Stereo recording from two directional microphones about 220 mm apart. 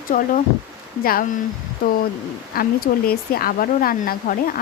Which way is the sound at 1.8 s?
40° left (ahead or behind).